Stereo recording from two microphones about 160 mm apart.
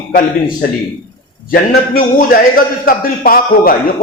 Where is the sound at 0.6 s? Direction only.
75° left (ahead or behind).